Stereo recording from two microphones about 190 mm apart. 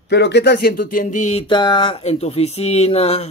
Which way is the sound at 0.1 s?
65° left (ahead or behind).